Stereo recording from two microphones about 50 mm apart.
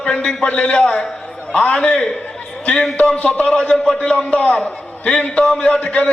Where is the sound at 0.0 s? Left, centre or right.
Centre.